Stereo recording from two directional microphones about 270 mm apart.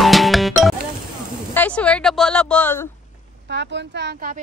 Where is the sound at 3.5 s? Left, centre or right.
Right.